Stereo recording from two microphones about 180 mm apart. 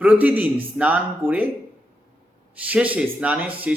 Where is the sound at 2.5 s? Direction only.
10° right (ahead or behind).